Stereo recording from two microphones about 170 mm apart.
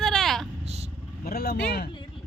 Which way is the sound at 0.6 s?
40° right (ahead or behind).